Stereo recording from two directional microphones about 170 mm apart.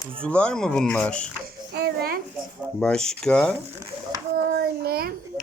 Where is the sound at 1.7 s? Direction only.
65° right (ahead or behind).